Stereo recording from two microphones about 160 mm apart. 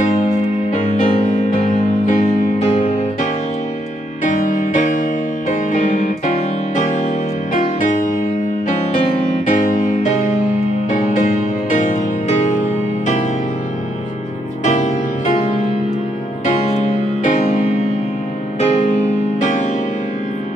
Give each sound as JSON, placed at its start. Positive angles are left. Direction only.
{"t": 0.0, "sound": "music", "side_deg": 45}
{"t": 2.6, "sound": "music", "side_deg": 40}
{"t": 4.2, "sound": "music", "side_deg": 55}
{"t": 7.8, "sound": "music", "side_deg": 60}
{"t": 9.5, "sound": "music", "side_deg": 55}
{"t": 14.6, "sound": "music", "side_deg": 45}
{"t": 19.4, "sound": "music", "side_deg": 50}